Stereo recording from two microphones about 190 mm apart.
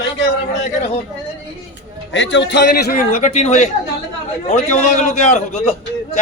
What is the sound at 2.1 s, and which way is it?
Speech, 70° left (ahead or behind).